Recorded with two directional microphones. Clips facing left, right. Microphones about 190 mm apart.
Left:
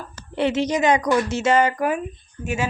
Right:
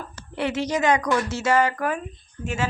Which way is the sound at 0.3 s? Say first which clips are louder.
Left 4 dB; 20° left (ahead or behind).